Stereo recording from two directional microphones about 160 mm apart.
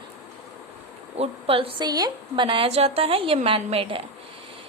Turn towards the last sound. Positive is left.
turn(degrees=-35)  # may be behind; listen again after turning